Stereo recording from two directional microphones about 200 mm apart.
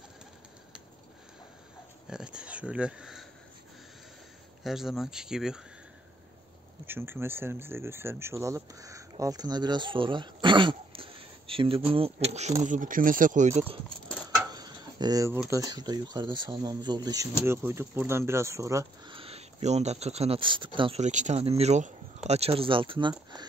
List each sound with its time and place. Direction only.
2.0 s speech: 5° right (ahead or behind)
4.6 s speech: centre (ahead or behind)
6.9 s speech: 10° right (ahead or behind); by 12.3 s 30° right (ahead or behind)
12.6 s speech: 40° right (ahead or behind)
14.5 s a sound: 20° right (ahead or behind)
15.5 s speech: 20° right (ahead or behind)
19.1 s speech: 30° right (ahead or behind)